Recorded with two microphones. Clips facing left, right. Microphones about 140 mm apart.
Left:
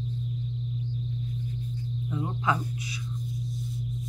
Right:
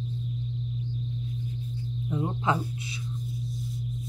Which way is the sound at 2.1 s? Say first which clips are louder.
Right 1 dB; 25° right (ahead or behind).